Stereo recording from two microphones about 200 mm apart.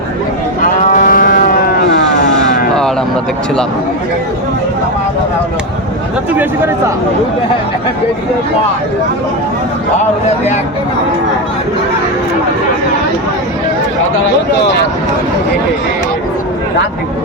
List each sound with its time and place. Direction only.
0.9 s livestock: 45° left (ahead or behind)
1.9 s vehicle: 60° left (ahead or behind)
6.3 s speech: 10° right (ahead or behind)